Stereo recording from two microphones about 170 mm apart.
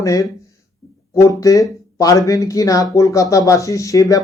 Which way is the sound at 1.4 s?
20° left (ahead or behind).